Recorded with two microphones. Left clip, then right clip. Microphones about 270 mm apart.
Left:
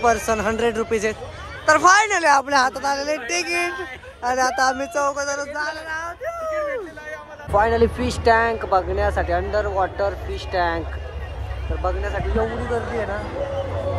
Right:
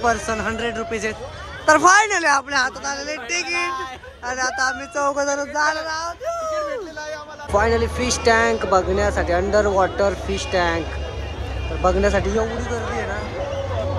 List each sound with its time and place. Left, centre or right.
0.0 s a woman's voice: centre
5.0 s speech: right
6.0 s a sound: centre
6.6 s a sound: centre
7.5 s speech: centre
11.8 s speech: centre